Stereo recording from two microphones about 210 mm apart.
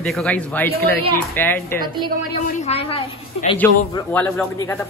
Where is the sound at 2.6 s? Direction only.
30° left (ahead or behind).